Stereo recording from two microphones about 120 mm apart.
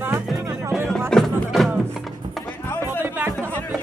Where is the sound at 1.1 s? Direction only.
Centre (ahead or behind).